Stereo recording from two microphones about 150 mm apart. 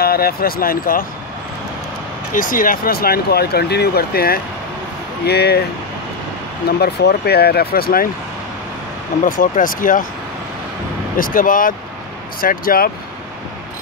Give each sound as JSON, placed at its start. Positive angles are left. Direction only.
{"t": 0.0, "sound": "speech", "side_deg": 90}
{"t": 2.3, "sound": "speech", "side_deg": 65}
{"t": 6.8, "sound": "speech", "side_deg": 90}
{"t": 9.2, "sound": "speech", "side_deg": 65}
{"t": 11.1, "sound": "speech", "side_deg": 65}